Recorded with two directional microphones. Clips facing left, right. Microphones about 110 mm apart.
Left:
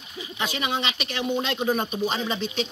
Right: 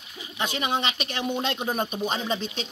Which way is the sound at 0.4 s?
45° right (ahead or behind).